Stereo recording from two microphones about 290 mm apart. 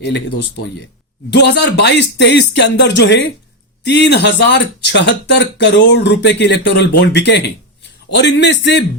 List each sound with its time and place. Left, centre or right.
0.0 s speech: left